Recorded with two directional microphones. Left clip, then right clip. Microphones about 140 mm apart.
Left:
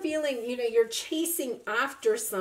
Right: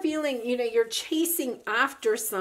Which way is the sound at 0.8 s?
45° right (ahead or behind).